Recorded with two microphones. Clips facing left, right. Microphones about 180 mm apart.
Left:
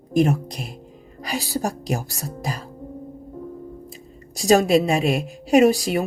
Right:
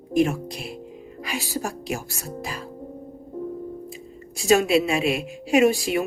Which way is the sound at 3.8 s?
40° left (ahead or behind).